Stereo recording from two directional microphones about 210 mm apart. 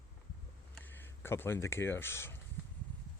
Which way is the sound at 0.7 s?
10° left (ahead or behind).